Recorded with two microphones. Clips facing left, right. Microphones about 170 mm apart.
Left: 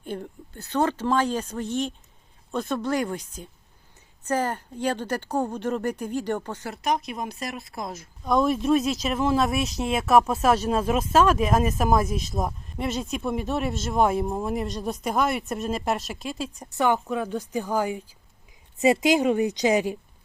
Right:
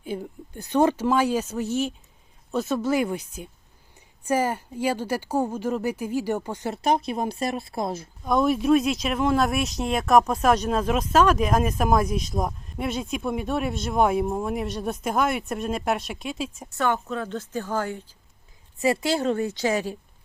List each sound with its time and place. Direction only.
0.0 s speech: 5° right (ahead or behind)
6.7 s speech: 30° right (ahead or behind)
8.2 s speech: centre (ahead or behind)
16.7 s speech: 15° left (ahead or behind)